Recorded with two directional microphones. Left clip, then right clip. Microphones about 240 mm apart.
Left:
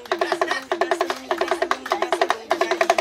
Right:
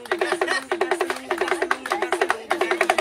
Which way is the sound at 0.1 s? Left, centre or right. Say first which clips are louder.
Even; centre.